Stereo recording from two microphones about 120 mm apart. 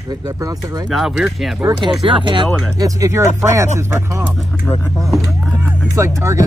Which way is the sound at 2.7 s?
30° right (ahead or behind).